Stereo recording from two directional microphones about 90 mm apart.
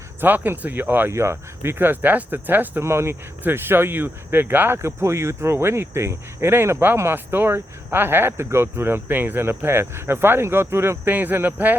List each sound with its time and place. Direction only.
0.2 s speech: 20° right (ahead or behind)